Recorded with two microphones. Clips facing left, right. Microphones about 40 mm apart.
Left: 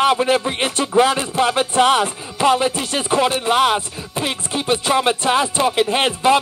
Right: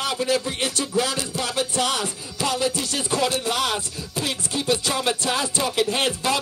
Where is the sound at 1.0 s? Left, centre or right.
Left.